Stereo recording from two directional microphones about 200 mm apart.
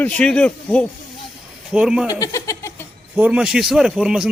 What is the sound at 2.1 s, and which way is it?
Speech, 15° left (ahead or behind).